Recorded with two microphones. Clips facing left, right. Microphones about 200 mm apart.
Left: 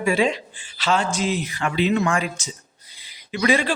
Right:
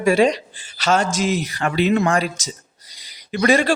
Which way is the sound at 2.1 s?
35° right (ahead or behind).